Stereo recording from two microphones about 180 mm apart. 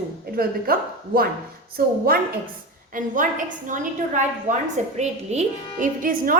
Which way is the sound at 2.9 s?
45° right (ahead or behind).